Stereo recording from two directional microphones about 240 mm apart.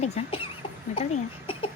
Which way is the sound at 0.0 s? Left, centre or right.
Left.